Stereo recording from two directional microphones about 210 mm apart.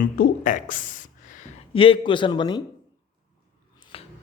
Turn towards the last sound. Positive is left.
turn(degrees=25)  # may be behind; listen again after turning